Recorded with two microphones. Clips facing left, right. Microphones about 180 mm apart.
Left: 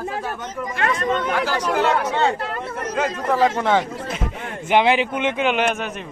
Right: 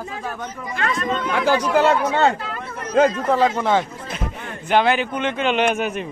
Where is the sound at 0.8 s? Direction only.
55° left (ahead or behind).